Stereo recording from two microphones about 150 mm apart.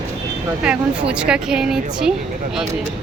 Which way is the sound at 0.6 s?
5° right (ahead or behind).